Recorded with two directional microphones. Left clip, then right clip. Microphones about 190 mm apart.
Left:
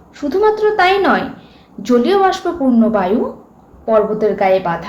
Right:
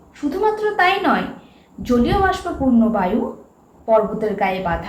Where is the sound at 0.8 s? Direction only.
60° left (ahead or behind).